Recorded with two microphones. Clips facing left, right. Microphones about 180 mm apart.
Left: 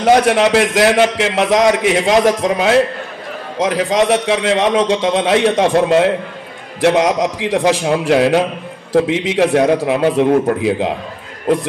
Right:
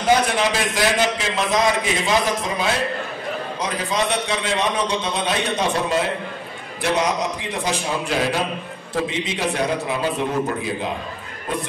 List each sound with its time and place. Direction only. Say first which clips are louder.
0.0 s a man's voice: left 7 dB; 75° left (ahead or behind)
3.5 s a man's voice: left 11 dB; 90° left; by 8.5 s 70° left (ahead or behind)
8.9 s a man's voice: left 10 dB; 80° left
9.8 s a man's voice: left 9 dB; 80° left